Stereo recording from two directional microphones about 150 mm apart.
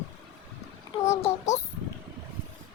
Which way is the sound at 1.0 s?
50° left (ahead or behind).